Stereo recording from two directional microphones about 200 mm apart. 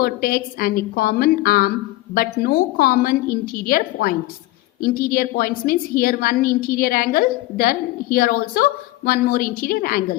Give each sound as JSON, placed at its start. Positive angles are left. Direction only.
{"t": 0.0, "sound": "a woman's voice", "side_deg": 50}